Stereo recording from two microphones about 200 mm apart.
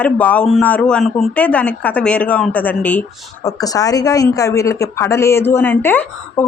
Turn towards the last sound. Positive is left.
turn(degrees=10)  # may be behind; listen again after turning